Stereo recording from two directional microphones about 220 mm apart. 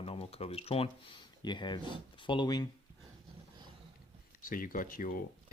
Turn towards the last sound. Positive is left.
turn(degrees=40)  # may be behind; listen again after turning